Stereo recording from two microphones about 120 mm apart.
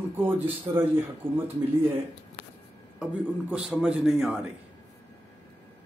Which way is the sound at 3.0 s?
10° right (ahead or behind).